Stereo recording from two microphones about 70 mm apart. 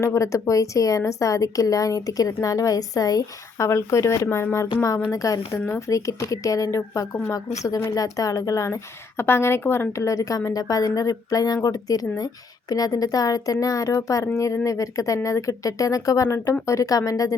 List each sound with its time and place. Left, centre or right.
0.0 s speech: left
3.7 s speech: left
9.9 s speech: left